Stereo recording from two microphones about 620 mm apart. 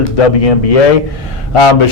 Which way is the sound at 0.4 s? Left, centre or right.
Left.